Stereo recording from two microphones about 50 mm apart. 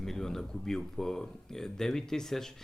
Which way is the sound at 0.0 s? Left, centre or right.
Centre.